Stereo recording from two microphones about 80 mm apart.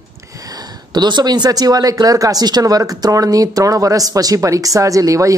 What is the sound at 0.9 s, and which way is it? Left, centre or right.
Speech, right.